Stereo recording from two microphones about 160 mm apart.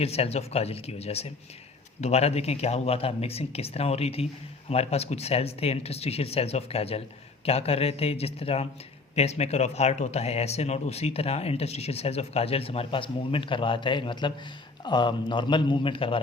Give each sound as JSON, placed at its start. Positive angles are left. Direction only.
{"t": 0.0, "sound": "a man's voice", "side_deg": 40}